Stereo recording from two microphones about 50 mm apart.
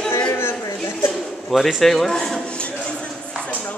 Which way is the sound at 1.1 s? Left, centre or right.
Centre.